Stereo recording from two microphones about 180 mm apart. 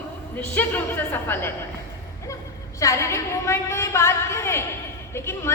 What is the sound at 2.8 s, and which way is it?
A woman's voice, 15° left (ahead or behind).